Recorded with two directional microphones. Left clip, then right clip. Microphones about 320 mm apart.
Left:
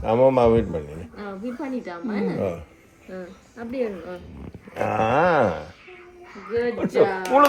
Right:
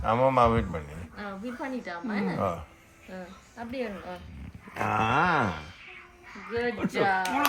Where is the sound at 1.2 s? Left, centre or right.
Centre.